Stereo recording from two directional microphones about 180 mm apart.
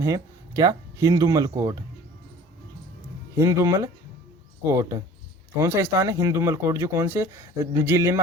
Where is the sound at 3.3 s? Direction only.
20° right (ahead or behind).